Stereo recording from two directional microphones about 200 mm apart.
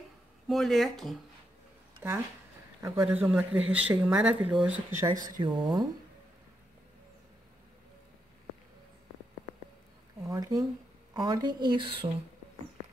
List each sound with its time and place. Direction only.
0.5 s speech: centre (ahead or behind)
2.0 s speech: 10° right (ahead or behind)
5.4 s speech: 20° right (ahead or behind)
10.2 s speech: 20° right (ahead or behind)